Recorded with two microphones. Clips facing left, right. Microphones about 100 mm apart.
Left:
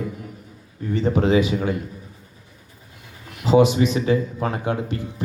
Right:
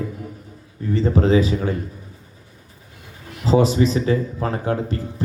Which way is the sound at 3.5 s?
35° right (ahead or behind).